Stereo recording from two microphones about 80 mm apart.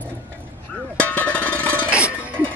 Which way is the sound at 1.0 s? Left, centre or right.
Centre.